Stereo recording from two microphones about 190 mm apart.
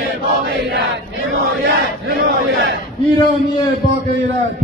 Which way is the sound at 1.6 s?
60° right (ahead or behind).